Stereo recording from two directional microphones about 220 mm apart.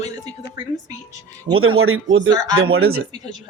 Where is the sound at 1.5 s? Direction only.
70° right (ahead or behind).